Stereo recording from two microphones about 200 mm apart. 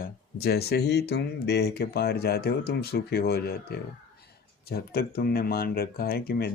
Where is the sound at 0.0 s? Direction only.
50° left (ahead or behind).